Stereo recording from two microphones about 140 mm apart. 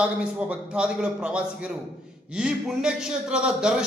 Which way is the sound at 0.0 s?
10° right (ahead or behind).